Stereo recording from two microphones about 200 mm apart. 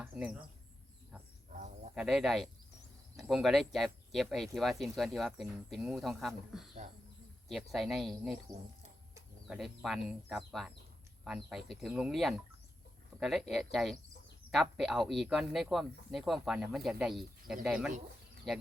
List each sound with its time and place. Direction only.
0.0 s speech: 5° right (ahead or behind)
1.5 s a sound: 40° right (ahead or behind)
2.0 s speech: centre (ahead or behind)
9.6 s speech: centre (ahead or behind)